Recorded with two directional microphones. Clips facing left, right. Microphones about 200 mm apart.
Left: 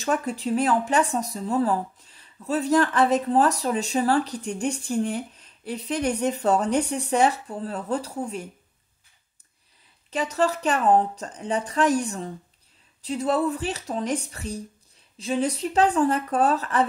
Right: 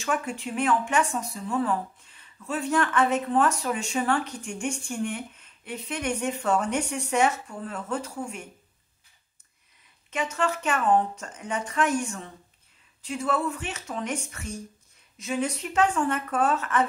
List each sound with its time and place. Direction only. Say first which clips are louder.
0.0 s speech: left 4 dB; 35° left (ahead or behind)
10.1 s speech: left 4 dB; 35° left (ahead or behind)